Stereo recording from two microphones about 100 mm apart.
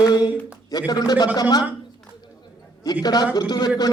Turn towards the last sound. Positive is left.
turn(degrees=45)  # may be behind; listen again after turning